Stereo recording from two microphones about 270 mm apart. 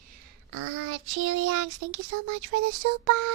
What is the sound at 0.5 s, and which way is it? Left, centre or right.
Child singing, right.